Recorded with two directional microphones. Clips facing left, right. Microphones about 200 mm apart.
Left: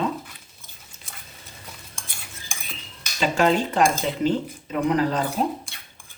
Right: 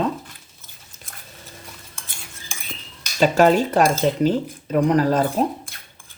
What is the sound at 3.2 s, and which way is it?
Speech, 45° right (ahead or behind).